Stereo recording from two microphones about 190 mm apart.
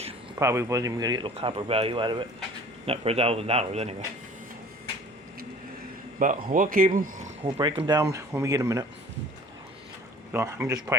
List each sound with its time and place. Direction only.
0.3 s a man's voice: 15° right (ahead or behind); by 3.9 s 35° right (ahead or behind)
6.1 s speech: 45° right (ahead or behind)
7.6 s speech: 20° right (ahead or behind)
10.3 s speech: 15° right (ahead or behind)